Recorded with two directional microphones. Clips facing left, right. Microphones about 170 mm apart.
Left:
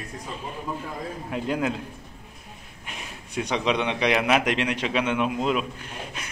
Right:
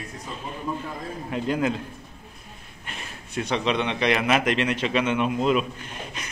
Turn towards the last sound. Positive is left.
turn(degrees=5)  # may be behind; listen again after turning